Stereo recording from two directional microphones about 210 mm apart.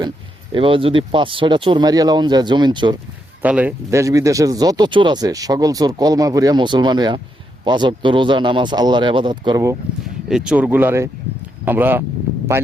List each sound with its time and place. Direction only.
0.5 s speech: 25° right (ahead or behind)
3.4 s speech: 5° right (ahead or behind)
10.2 s speech: 5° right (ahead or behind)